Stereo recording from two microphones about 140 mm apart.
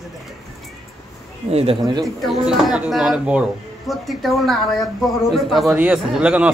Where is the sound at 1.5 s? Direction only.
45° right (ahead or behind).